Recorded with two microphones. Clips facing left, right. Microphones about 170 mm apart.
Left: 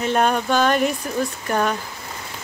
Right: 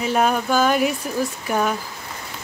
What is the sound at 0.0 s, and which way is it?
Speech, 5° right (ahead or behind).